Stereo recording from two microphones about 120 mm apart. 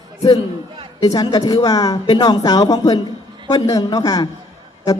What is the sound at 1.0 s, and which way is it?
A woman's voice, 30° left (ahead or behind).